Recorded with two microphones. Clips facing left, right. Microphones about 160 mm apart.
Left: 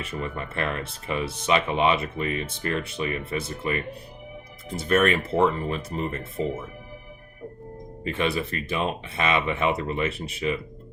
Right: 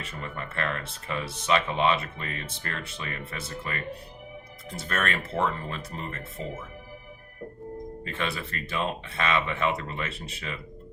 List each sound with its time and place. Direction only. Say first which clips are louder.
0.0 s speech: left 5 dB; 15° left (ahead or behind)
4.9 s speech: left 9 dB; 15° left (ahead or behind)
8.0 s speech: left 8 dB; 15° left (ahead or behind)